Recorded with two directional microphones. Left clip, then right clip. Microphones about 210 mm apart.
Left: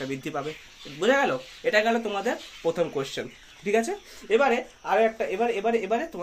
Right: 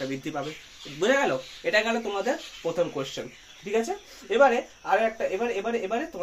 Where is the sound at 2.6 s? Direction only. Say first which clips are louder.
Left 1 dB; 30° left (ahead or behind).